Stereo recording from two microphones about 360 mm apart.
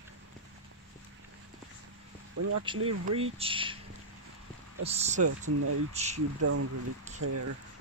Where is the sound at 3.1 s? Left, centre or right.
Centre.